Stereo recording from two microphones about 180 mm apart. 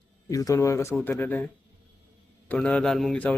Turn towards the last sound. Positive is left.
turn(degrees=5)  # may be behind; listen again after turning